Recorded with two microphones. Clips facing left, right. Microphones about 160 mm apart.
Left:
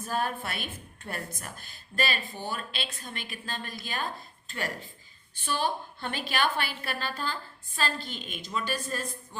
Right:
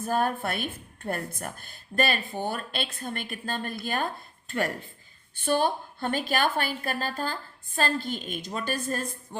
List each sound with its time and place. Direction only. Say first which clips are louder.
0.0 s a woman's voice: right 5 dB; 50° right (ahead or behind)